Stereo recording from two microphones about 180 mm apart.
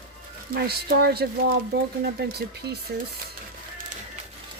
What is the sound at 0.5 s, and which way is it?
Speech, 60° right (ahead or behind).